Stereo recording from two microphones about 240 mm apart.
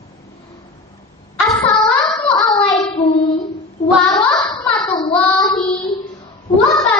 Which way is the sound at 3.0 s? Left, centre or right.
Left.